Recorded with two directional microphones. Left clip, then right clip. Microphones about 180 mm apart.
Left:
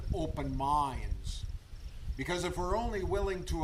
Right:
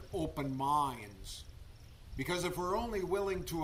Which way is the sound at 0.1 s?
15° right (ahead or behind).